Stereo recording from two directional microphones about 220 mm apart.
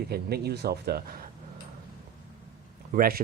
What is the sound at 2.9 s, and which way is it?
Speech, 40° right (ahead or behind).